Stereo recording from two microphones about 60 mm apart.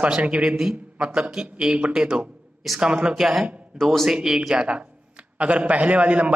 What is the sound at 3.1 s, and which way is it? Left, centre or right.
Speech, centre.